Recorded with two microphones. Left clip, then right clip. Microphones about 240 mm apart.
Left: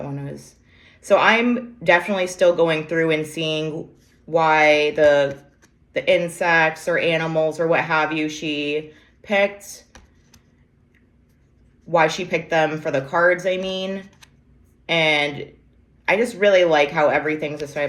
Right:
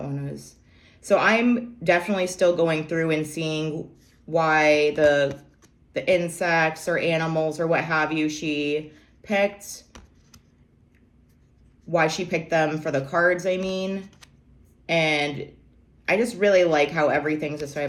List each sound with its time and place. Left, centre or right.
0.0 s a sound: centre
1.0 s speech: centre
11.9 s speech: centre